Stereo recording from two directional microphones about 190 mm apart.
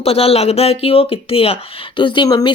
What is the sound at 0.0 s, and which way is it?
Speech, 30° left (ahead or behind).